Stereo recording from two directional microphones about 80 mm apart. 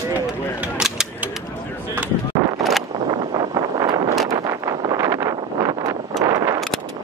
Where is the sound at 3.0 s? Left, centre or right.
Right.